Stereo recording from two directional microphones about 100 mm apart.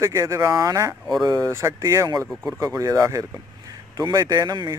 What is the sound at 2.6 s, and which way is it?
Speech, 35° right (ahead or behind).